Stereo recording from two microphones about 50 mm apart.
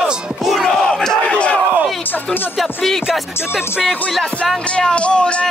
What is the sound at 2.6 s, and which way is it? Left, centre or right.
Speech, centre.